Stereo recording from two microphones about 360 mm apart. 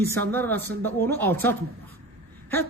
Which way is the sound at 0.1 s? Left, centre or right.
Centre.